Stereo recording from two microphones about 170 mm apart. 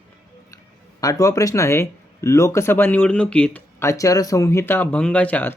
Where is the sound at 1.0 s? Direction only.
20° left (ahead or behind).